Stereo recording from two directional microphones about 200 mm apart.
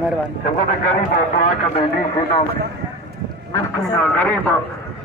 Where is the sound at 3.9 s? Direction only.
5° left (ahead or behind).